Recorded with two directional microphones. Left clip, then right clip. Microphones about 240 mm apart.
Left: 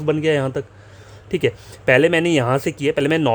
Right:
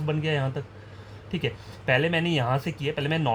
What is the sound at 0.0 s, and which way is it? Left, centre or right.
Speech, left.